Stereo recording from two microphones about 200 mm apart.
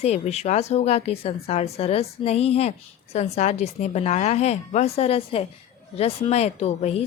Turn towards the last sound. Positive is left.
turn(degrees=35)  # may be behind; listen again after turning